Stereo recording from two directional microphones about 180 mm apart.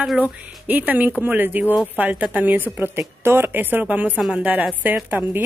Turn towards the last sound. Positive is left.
turn(degrees=-10)  # may be behind; listen again after turning